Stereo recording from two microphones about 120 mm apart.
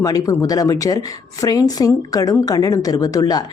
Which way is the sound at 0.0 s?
30° left (ahead or behind).